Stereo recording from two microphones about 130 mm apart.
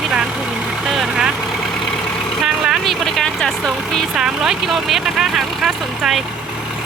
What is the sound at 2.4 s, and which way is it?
Vehicle, centre (ahead or behind).